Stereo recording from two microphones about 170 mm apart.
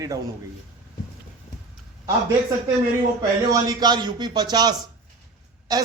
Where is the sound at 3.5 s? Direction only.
25° right (ahead or behind).